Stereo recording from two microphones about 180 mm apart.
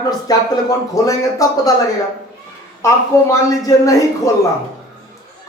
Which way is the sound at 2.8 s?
15° left (ahead or behind).